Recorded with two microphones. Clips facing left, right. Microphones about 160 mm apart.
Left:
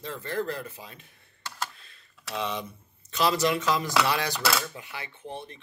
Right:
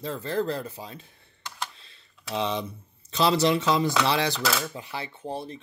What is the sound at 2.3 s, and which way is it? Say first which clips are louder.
Speech: right 4 dB; 30° right (ahead or behind).